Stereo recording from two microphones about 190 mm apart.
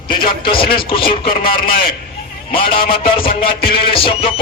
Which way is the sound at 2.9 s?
50° left (ahead or behind).